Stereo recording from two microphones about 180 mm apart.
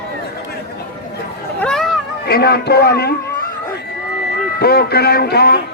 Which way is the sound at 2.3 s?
60° left (ahead or behind).